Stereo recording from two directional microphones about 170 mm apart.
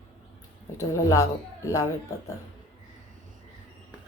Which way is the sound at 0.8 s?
20° left (ahead or behind).